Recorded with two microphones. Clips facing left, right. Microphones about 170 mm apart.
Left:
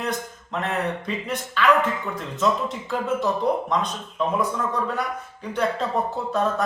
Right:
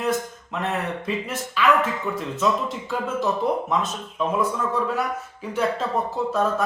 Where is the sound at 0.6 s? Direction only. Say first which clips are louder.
Even; 5° right (ahead or behind).